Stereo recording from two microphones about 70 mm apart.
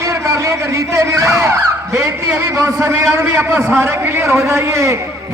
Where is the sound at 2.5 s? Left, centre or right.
Right.